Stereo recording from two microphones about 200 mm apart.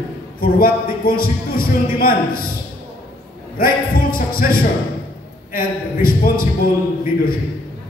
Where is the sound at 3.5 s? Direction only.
45° left (ahead or behind).